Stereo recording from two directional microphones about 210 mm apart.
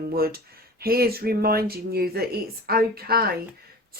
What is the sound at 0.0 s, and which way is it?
Speech, 45° right (ahead or behind).